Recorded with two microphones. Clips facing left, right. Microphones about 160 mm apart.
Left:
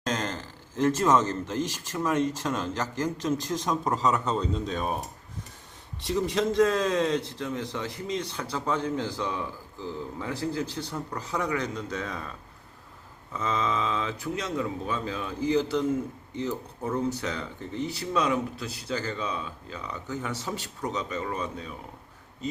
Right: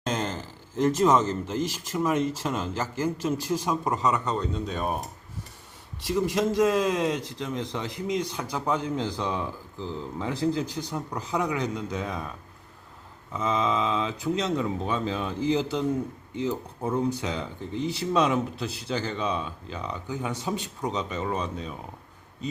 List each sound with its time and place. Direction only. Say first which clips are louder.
0.0 s a man's voice: right 1 dB; 10° right (ahead or behind)
6.1 s a man's voice: right 1 dB; 5° right (ahead or behind)
13.3 s a man's voice: right 3 dB; 15° right (ahead or behind)